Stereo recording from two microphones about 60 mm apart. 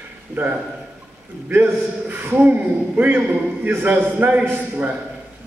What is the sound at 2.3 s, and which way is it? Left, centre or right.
A man's voice, right.